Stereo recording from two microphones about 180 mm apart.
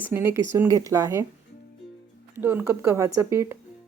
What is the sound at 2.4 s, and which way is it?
A woman's voice, 10° right (ahead or behind).